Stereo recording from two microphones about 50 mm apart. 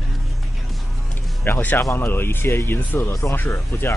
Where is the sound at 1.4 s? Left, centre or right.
Left.